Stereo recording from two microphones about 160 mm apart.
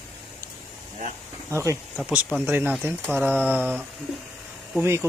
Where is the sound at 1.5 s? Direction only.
20° right (ahead or behind).